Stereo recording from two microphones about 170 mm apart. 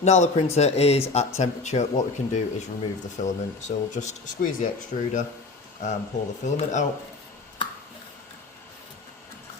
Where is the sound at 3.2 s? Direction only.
45° left (ahead or behind).